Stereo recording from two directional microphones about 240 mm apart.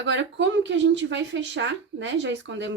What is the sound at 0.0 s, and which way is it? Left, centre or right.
Speech, right.